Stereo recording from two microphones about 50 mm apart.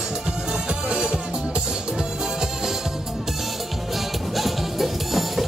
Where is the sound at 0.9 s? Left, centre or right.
Centre.